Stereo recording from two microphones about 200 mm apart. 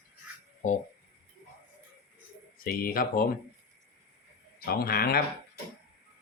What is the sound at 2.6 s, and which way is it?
Speech, 45° left (ahead or behind).